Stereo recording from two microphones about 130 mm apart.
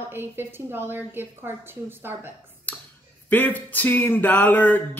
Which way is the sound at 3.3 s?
15° left (ahead or behind).